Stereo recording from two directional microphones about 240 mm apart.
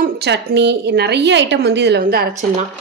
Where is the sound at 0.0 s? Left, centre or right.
Right.